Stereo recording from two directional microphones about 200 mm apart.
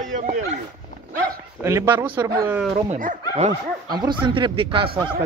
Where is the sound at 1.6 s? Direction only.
10° right (ahead or behind).